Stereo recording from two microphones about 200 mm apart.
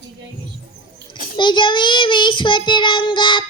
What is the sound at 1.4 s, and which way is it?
Child singing, 25° left (ahead or behind).